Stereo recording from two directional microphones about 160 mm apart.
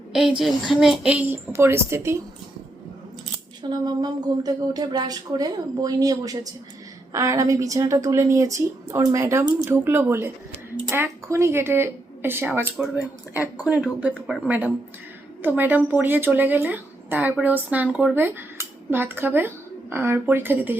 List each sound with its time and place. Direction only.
0.1 s a woman's voice: 5° right (ahead or behind)
3.6 s a woman's voice: 25° right (ahead or behind)